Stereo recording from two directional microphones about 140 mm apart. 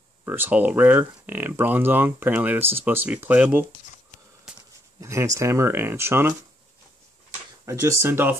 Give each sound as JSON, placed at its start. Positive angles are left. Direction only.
{"t": 0.2, "sound": "speech", "side_deg": -15}
{"t": 5.0, "sound": "speech", "side_deg": -20}
{"t": 7.6, "sound": "speech", "side_deg": -20}